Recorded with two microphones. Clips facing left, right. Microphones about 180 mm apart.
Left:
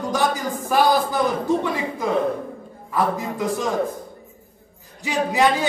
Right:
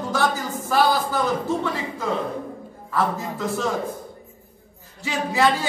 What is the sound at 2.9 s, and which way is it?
Speech, 15° left (ahead or behind).